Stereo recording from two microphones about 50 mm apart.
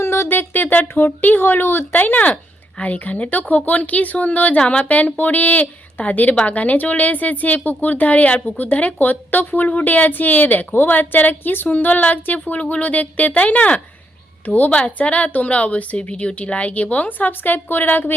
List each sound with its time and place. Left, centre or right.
0.0 s speech: left
4.9 s speech: left